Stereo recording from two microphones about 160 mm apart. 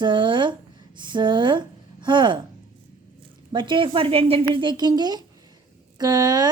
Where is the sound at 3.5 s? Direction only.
30° right (ahead or behind).